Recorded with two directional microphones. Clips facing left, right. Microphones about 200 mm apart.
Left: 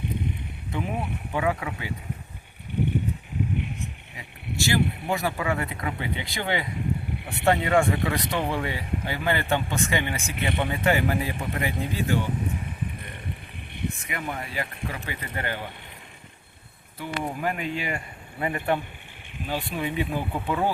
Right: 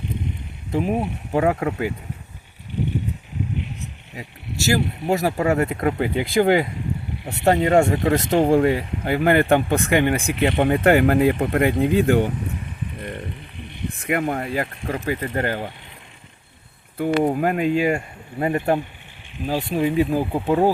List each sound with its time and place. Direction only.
0.7 s speech: 35° right (ahead or behind)
4.2 s speech: 40° right (ahead or behind); by 12.3 s 60° right (ahead or behind)
13.8 s speech: 60° right (ahead or behind)
17.0 s speech: 50° right (ahead or behind)